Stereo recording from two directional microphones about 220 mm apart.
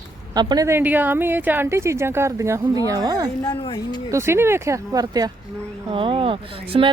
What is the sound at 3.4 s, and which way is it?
Speech, 20° left (ahead or behind).